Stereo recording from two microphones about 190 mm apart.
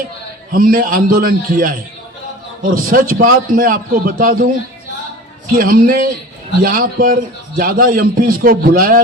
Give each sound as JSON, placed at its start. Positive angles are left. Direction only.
{"t": 0.5, "sound": "a man's voice", "side_deg": -50}
{"t": 5.5, "sound": "a man's voice", "side_deg": -50}